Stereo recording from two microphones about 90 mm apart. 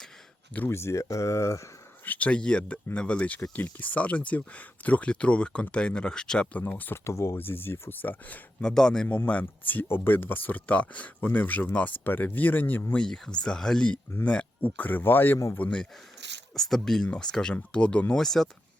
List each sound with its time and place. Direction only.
0.7 s speech: 30° left (ahead or behind)
2.0 s speech: 15° left (ahead or behind)
8.6 s speech: 5° left (ahead or behind)
16.6 s speech: 5° left (ahead or behind)